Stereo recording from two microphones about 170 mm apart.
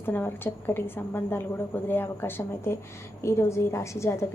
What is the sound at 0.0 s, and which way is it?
A woman's voice, 15° left (ahead or behind).